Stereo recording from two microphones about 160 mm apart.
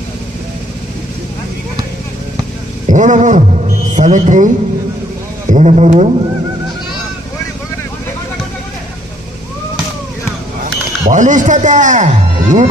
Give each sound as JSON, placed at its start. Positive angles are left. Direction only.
{"t": 2.9, "sound": "a sound", "side_deg": -50}
{"t": 3.9, "sound": "a man's voice", "side_deg": -50}
{"t": 5.5, "sound": "speech", "side_deg": -45}
{"t": 11.1, "sound": "speech", "side_deg": -50}